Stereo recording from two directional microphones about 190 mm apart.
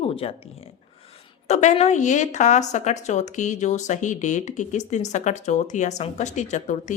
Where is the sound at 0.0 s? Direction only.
30° left (ahead or behind).